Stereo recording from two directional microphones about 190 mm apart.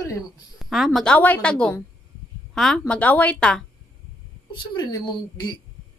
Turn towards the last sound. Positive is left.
turn(degrees=20)  # may be behind; listen again after turning